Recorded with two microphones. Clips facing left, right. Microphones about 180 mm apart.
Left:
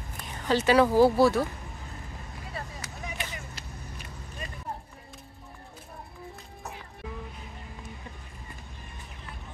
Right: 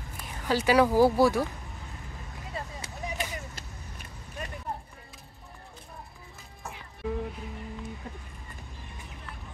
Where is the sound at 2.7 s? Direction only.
35° right (ahead or behind).